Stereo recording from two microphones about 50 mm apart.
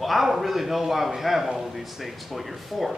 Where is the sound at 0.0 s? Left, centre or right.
Centre.